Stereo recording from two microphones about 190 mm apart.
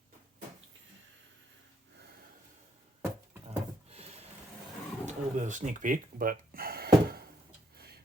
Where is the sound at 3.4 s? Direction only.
30° right (ahead or behind).